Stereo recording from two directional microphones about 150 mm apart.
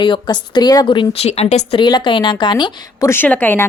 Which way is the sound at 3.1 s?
10° left (ahead or behind).